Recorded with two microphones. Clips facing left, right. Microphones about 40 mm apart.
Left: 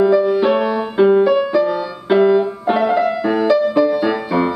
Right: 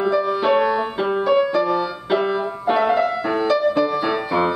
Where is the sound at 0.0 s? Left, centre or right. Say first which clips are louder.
Left 6 dB; centre.